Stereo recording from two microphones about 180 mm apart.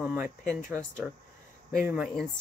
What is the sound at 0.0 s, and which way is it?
Speech, 10° right (ahead or behind).